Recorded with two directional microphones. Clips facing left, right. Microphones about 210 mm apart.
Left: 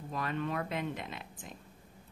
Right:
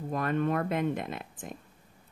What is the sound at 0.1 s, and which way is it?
Speech, 50° right (ahead or behind).